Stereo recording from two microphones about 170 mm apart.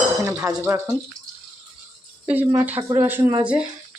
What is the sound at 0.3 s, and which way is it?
Dishes, 20° right (ahead or behind).